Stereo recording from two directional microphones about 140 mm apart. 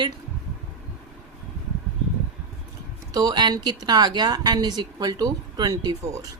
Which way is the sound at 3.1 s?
25° right (ahead or behind).